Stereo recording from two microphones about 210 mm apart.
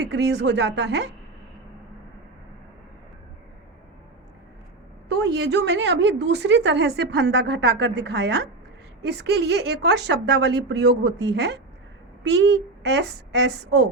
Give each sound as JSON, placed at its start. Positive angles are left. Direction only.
{"t": 0.0, "sound": "a woman's voice", "side_deg": -55}
{"t": 5.2, "sound": "a woman's voice", "side_deg": -55}